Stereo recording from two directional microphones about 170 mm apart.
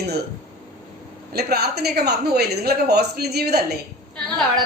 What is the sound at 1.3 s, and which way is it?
A woman's voice, 70° right (ahead or behind).